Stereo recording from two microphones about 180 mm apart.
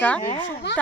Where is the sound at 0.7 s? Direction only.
80° left.